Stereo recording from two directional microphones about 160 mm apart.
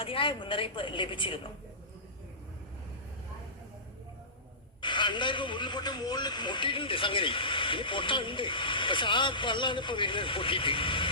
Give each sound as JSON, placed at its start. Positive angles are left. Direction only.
{"t": 0.0, "sound": "a man's voice", "side_deg": 35}
{"t": 4.8, "sound": "a man's voice", "side_deg": 30}